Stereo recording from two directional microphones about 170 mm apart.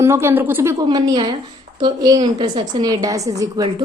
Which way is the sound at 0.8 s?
25° right (ahead or behind).